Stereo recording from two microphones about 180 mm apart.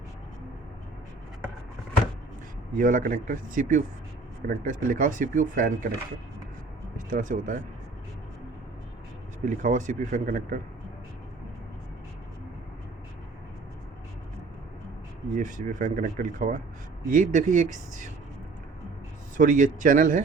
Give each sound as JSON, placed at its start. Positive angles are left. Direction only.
{"t": 2.7, "sound": "speech", "side_deg": -50}
{"t": 6.9, "sound": "speech", "side_deg": -45}
{"t": 9.5, "sound": "speech", "side_deg": -45}
{"t": 15.4, "sound": "speech", "side_deg": -45}
{"t": 19.4, "sound": "speech", "side_deg": -45}